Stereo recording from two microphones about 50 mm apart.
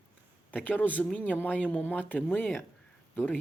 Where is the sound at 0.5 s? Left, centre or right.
Left.